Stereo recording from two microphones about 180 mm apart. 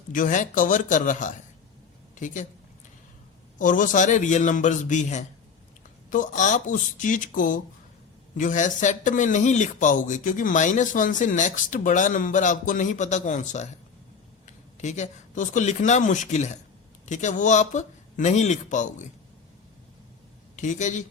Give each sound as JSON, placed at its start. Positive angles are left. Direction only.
{"t": 0.1, "sound": "speech", "side_deg": 45}
{"t": 3.6, "sound": "speech", "side_deg": 45}
{"t": 14.8, "sound": "speech", "side_deg": 40}
{"t": 20.6, "sound": "speech", "side_deg": 45}